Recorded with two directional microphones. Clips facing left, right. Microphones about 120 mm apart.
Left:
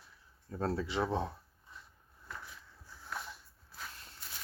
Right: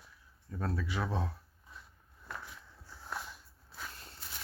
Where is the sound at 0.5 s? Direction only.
30° left (ahead or behind).